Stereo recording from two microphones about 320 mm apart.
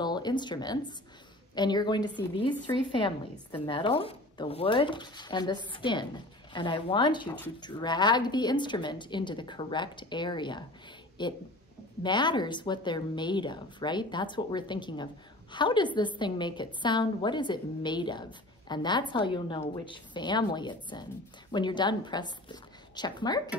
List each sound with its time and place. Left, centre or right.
0.0 s a woman's voice: centre